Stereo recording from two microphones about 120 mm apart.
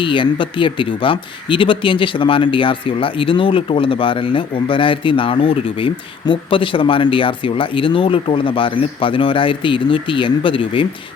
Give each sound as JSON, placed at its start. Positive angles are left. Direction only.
{"t": 0.0, "sound": "speech", "side_deg": 45}